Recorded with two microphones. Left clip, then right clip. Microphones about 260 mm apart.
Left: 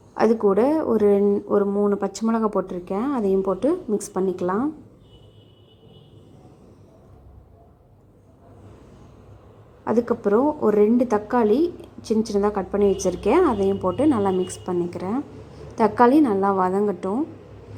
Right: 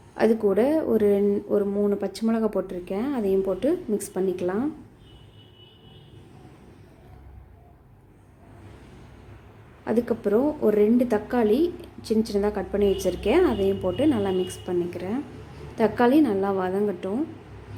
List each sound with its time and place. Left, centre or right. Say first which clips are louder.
0.2 s a woman's voice: left 3 dB; centre
9.8 s a woman's voice: left 3 dB; centre